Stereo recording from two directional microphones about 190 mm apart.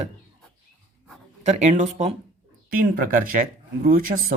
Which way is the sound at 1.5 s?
40° right (ahead or behind).